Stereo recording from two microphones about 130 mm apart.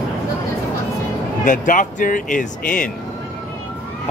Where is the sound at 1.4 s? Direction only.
90° left.